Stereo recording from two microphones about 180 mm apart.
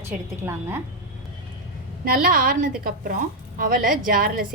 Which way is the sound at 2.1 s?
50° right (ahead or behind).